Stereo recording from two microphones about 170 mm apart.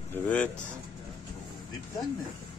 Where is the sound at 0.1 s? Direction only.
10° left (ahead or behind).